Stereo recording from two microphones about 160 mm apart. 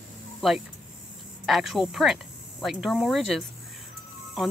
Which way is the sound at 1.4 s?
Centre (ahead or behind).